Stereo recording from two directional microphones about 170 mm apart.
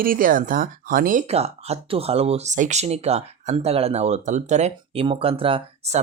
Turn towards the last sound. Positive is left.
turn(degrees=-35)  # may be behind; listen again after turning